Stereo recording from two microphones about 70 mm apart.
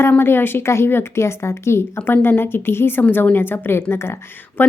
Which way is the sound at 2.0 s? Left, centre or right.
Left.